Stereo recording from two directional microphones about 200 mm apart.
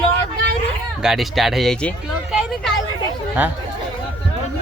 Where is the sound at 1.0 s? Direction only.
Centre (ahead or behind).